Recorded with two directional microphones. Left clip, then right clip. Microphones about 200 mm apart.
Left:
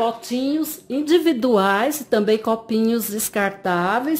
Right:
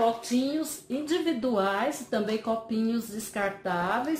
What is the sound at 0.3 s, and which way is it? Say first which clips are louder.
A woman's voice: left 6 dB; 50° left (ahead or behind).